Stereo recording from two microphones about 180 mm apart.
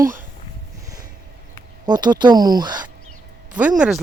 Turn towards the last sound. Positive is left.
turn(degrees=-5)  # may be behind; listen again after turning